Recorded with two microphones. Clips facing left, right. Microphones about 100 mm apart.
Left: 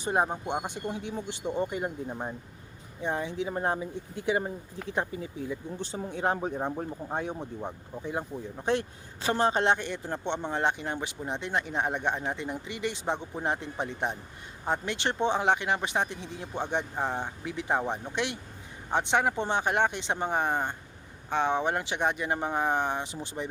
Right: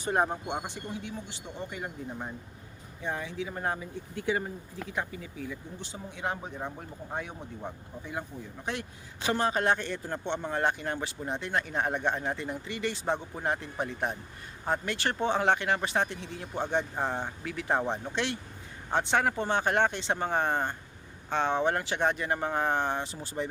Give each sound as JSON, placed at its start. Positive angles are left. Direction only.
{"t": 0.0, "sound": "speech", "side_deg": 15}
{"t": 1.7, "sound": "speech", "side_deg": 25}